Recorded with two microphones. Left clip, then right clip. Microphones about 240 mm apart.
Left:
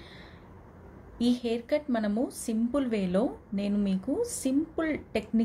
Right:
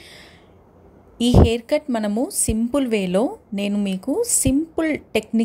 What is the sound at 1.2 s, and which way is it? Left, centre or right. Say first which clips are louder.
A woman's voice: right 11 dB; right.